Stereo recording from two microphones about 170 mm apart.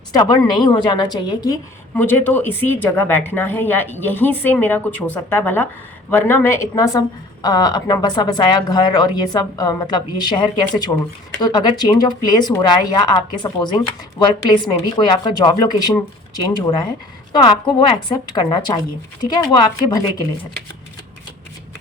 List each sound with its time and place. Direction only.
0.1 s a woman's voice: 25° left (ahead or behind)
2.0 s a woman's voice: 10° left (ahead or behind)